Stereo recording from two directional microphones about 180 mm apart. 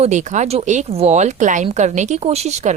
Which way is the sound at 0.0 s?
40° right (ahead or behind).